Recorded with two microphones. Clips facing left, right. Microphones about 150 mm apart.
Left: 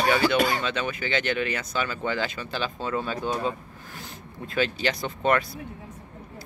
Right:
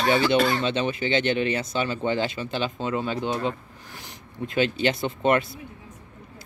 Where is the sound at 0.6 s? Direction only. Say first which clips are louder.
Right 4 dB; 30° right (ahead or behind).